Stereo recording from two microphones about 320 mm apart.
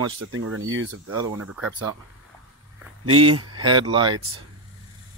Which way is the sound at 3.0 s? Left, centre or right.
Right.